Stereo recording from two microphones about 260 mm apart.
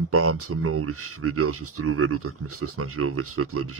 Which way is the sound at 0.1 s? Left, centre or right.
Right.